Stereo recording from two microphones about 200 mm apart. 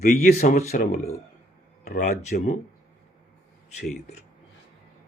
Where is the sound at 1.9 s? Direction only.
45° left (ahead or behind).